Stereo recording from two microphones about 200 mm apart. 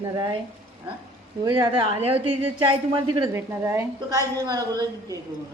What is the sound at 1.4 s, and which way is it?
A woman's voice, 20° right (ahead or behind).